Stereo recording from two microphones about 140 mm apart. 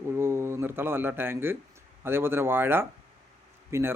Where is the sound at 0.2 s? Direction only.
20° right (ahead or behind).